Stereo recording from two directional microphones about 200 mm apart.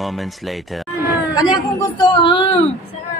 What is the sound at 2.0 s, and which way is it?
Speech, 25° left (ahead or behind).